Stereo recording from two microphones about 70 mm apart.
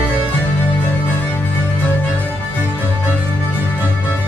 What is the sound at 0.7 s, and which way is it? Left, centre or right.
Music, left.